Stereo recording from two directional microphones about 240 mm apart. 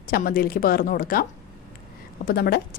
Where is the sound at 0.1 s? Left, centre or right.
Left.